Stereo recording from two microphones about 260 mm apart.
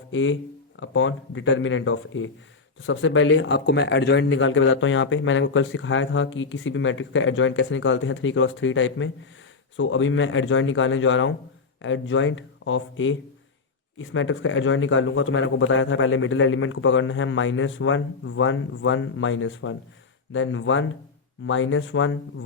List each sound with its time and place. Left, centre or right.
0.1 s speech: left